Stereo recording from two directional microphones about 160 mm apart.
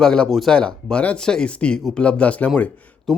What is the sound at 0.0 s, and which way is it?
Speech, 5° left (ahead or behind).